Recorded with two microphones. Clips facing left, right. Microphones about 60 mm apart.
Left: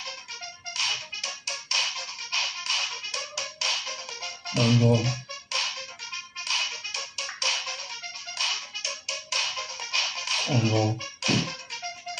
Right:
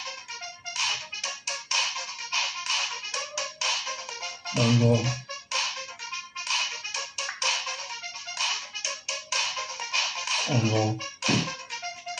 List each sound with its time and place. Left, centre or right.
0.7 s music: centre